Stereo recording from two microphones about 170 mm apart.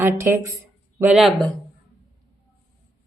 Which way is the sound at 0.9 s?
5° right (ahead or behind).